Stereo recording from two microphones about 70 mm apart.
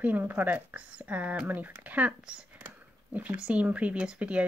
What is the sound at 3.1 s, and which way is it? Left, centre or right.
Speech, right.